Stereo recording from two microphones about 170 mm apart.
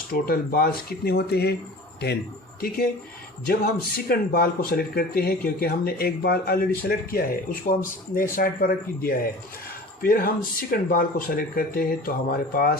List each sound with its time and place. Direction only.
0.1 s speech: 60° left (ahead or behind)
3.4 s speech: 60° left (ahead or behind)